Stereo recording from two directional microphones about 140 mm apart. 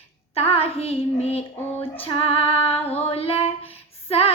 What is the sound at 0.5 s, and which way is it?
Child singing, 45° left (ahead or behind).